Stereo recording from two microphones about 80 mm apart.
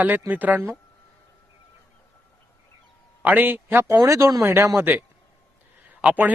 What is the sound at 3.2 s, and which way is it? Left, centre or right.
Speech, right.